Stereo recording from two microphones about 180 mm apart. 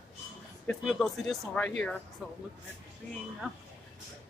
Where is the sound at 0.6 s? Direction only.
Centre (ahead or behind).